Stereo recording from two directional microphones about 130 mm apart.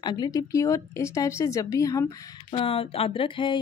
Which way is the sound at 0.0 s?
35° left (ahead or behind).